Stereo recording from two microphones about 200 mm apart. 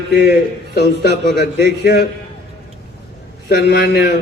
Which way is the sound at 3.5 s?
55° left (ahead or behind).